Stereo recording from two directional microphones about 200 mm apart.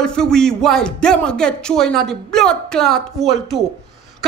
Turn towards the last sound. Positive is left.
turn(degrees=0)  # may be behind; listen again after turning